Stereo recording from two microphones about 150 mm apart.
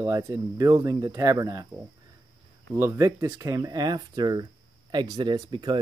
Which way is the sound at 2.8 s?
20° right (ahead or behind).